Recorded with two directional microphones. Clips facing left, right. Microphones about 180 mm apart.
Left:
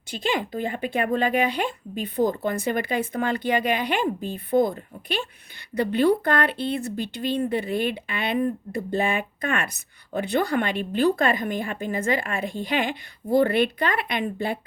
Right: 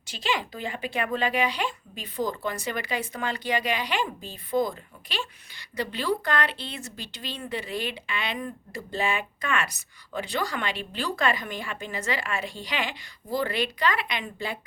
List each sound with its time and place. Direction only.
0.1 s a woman's voice: 50° left (ahead or behind)